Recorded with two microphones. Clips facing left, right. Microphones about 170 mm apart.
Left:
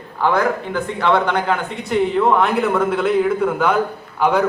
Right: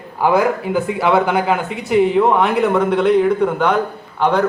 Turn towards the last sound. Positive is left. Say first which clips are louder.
# right 1 dB
turn(degrees=10)  # may be behind; listen again after turning